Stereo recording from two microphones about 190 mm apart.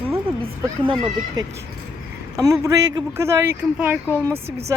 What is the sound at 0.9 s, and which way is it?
Speech, 30° right (ahead or behind).